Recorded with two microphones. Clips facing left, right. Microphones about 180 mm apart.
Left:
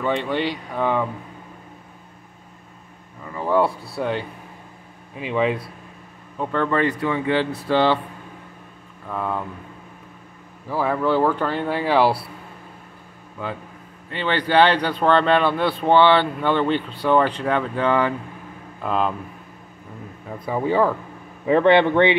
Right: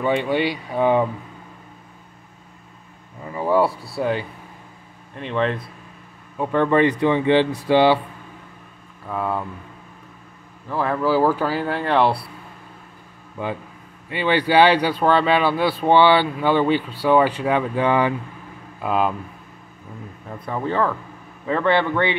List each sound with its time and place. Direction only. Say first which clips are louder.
0.0 s speech: right 2 dB; 10° right (ahead or behind)
3.3 s speech: right 1 dB; 10° right (ahead or behind); by 5.6 s 5° left (ahead or behind)
6.3 s speech: right 4 dB; 15° right (ahead or behind)
9.0 s speech: right 2 dB; 5° right (ahead or behind)
10.7 s speech: even; centre (ahead or behind)
13.4 s speech: right 3 dB; 20° right (ahead or behind)
20.2 s speech: left 3 dB; 10° left (ahead or behind)